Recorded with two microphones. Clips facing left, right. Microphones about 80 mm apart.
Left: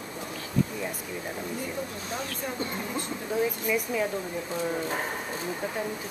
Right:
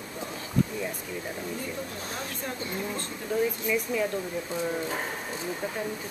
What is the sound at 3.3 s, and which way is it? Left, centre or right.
Speech, centre.